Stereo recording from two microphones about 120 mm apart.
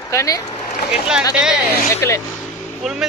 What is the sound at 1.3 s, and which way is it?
Speech, 5° right (ahead or behind).